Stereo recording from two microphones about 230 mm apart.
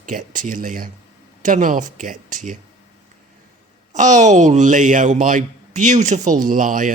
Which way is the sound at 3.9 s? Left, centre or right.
Right.